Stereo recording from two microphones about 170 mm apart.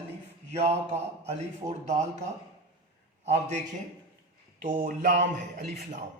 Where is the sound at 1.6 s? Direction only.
25° right (ahead or behind).